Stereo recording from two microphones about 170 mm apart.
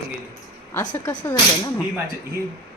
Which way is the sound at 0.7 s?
20° left (ahead or behind).